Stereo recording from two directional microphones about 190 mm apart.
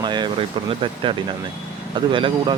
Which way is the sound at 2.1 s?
25° right (ahead or behind).